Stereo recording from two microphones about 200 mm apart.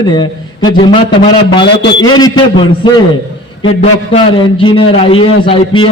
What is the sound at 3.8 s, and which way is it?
A man's voice, 25° left (ahead or behind).